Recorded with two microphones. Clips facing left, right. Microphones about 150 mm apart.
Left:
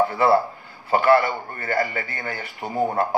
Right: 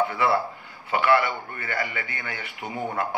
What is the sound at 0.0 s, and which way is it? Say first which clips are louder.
A man's voice: left 5 dB; 35° left (ahead or behind).